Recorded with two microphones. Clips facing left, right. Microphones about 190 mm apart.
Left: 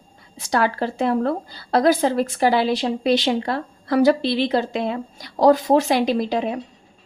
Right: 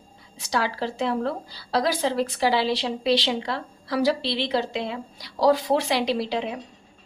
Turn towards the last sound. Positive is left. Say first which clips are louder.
# left 5 dB
turn(degrees=50)  # may be behind; listen again after turning